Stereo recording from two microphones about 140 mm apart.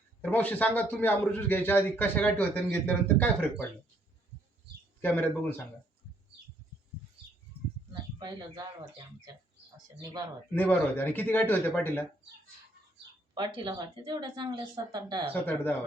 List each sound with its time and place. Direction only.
0.2 s a man's voice: 10° left (ahead or behind)
4.9 s a man's voice: 15° left (ahead or behind)
8.2 s speech: 30° right (ahead or behind)
10.5 s a man's voice: 15° left (ahead or behind)
13.3 s speech: 35° right (ahead or behind)
15.3 s a man's voice: 15° left (ahead or behind)